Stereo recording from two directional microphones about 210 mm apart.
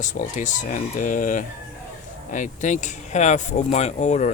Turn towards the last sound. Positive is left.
turn(degrees=35)  # may be behind; listen again after turning